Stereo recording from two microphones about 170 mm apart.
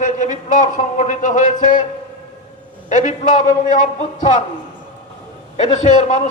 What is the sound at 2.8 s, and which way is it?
A man's voice, 45° left (ahead or behind).